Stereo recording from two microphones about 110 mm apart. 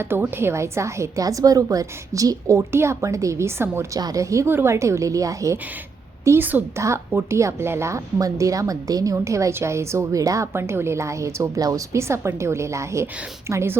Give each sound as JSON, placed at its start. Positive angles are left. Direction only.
{"t": 0.0, "sound": "a woman's voice", "side_deg": -20}
{"t": 6.2, "sound": "a woman's voice", "side_deg": -20}